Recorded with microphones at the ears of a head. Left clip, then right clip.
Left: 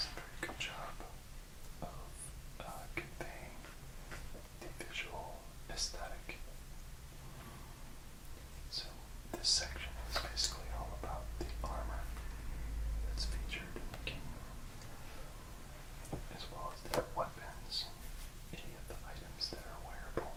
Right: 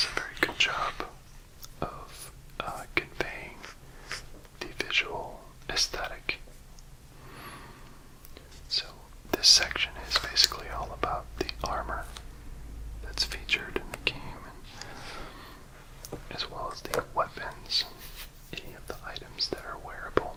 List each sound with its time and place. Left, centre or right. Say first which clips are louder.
0.0 s whispering: right 15 dB; right
7.3 s gasp: right 12 dB; right
8.7 s whispering: right 13 dB; right